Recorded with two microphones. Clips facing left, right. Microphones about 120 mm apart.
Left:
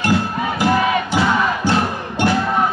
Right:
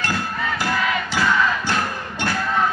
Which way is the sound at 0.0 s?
15° left (ahead or behind).